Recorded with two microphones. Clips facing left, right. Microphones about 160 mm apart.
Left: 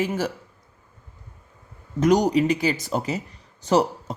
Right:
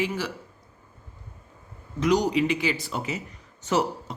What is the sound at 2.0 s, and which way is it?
Speech, 45° left (ahead or behind).